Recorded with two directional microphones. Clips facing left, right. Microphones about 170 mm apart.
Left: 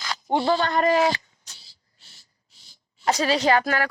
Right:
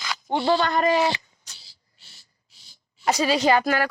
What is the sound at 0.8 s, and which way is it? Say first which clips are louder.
Speech: left 1 dB; centre (ahead or behind).